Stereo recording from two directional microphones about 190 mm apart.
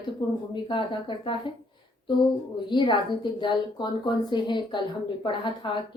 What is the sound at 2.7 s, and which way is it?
A woman's voice, 25° left (ahead or behind).